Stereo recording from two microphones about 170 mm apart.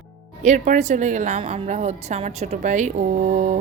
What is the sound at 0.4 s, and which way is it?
Speech, 45° right (ahead or behind).